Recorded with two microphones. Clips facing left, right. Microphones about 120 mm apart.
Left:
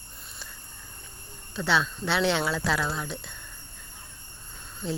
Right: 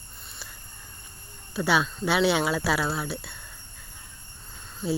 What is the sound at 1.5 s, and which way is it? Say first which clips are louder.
Speech: right 2 dB; 10° right (ahead or behind).